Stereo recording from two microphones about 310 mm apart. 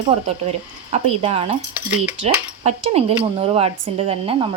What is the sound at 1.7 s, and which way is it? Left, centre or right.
Speech, centre.